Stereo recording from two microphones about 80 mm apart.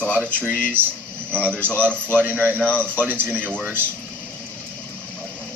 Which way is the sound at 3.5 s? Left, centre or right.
Centre.